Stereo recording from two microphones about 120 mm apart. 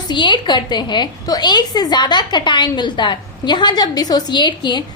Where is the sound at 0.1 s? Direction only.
40° left (ahead or behind).